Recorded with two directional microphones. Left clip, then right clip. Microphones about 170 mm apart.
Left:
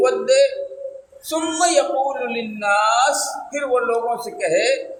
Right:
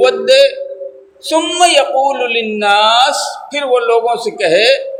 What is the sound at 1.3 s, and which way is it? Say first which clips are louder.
Speech: right 8 dB; 30° right (ahead or behind).